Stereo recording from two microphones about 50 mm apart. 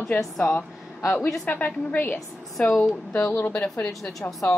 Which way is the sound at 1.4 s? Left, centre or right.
Left.